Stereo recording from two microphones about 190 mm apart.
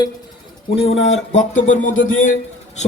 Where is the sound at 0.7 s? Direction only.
30° left (ahead or behind).